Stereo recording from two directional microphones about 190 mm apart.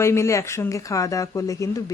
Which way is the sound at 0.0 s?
15° left (ahead or behind).